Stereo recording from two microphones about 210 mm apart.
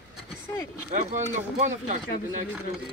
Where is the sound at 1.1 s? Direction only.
35° right (ahead or behind).